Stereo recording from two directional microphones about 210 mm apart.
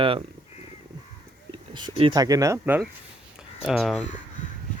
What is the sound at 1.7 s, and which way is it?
Speech, 20° right (ahead or behind).